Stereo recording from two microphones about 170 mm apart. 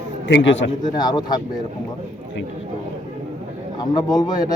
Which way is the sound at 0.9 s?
25° left (ahead or behind).